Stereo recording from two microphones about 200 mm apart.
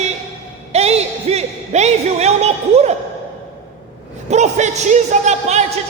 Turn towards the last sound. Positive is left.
turn(degrees=-35)  # may be behind; listen again after turning